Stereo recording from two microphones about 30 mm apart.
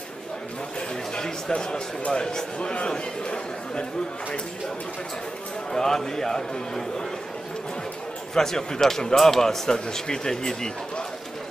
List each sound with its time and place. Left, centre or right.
1.5 s speech: left
5.7 s speech: centre
8.4 s speech: centre